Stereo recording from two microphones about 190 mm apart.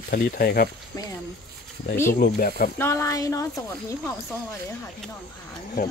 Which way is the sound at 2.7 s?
15° left (ahead or behind).